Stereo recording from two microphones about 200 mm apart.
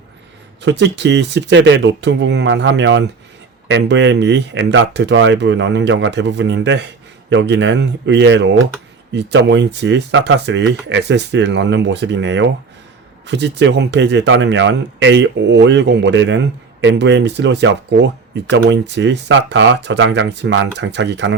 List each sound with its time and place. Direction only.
0.6 s speech: 60° right (ahead or behind)